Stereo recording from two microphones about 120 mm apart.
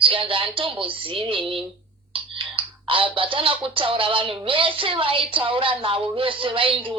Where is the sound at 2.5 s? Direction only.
45° right (ahead or behind).